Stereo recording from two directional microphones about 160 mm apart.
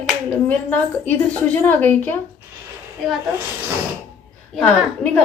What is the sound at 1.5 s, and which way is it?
Speech, 10° left (ahead or behind).